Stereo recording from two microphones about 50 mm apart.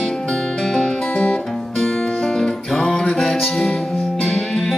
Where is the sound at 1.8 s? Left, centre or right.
Centre.